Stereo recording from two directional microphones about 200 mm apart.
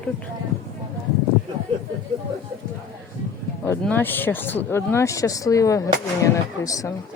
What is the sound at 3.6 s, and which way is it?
Speech, 10° left (ahead or behind).